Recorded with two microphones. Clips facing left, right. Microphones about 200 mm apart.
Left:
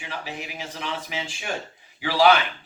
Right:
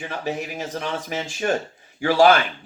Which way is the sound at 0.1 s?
45° right (ahead or behind).